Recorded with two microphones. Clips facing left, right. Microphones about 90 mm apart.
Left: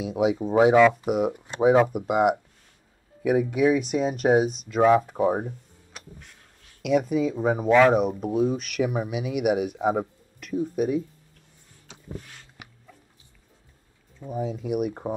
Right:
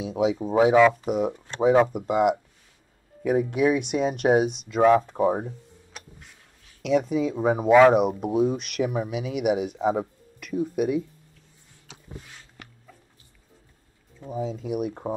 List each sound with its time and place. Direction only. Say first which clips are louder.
0.0 s speech: left 1 dB; 10° left (ahead or behind)
6.8 s speech: even; 5° left (ahead or behind)
9.3 s speech: left 1 dB; 55° left (ahead or behind)
9.6 s speech: even; 5° left (ahead or behind)
10.5 s speech: even; 5° right (ahead or behind)
12.6 s dog: even; 15° left (ahead or behind)
14.2 s speech: left 1 dB; 10° left (ahead or behind)